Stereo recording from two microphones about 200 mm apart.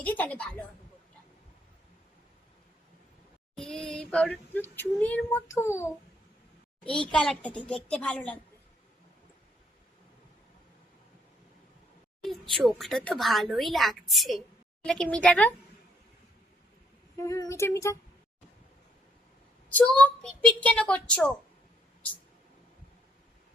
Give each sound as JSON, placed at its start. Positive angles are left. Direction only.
{"t": 0.0, "sound": "a woman's voice", "side_deg": 10}
{"t": 3.5, "sound": "female singing", "side_deg": 5}
{"t": 6.9, "sound": "speech", "side_deg": 5}
{"t": 12.2, "sound": "speech", "side_deg": 0}
{"t": 17.2, "sound": "female singing", "side_deg": 15}
{"t": 19.7, "sound": "speech", "side_deg": 5}